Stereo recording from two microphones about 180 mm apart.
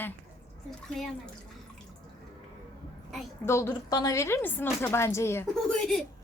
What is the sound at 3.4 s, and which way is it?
A woman's voice, 15° left (ahead or behind).